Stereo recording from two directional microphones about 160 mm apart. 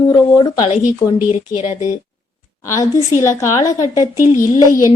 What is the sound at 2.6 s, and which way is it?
A woman's voice, 20° left (ahead or behind).